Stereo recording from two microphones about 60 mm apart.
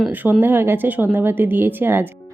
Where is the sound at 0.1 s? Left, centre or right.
Right.